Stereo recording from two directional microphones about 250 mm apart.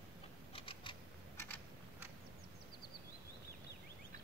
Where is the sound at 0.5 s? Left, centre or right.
Left.